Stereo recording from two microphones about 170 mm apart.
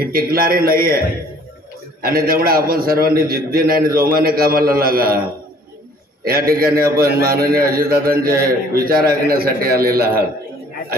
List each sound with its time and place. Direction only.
0.0 s a man's voice: 60° right (ahead or behind)
6.2 s a man's voice: 60° right (ahead or behind)